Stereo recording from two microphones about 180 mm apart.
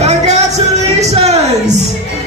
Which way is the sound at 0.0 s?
40° right (ahead or behind).